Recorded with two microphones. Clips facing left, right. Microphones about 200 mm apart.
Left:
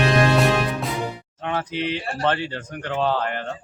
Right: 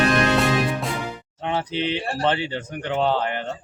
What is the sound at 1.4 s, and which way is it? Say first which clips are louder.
Speech: right 1 dB; 25° right (ahead or behind).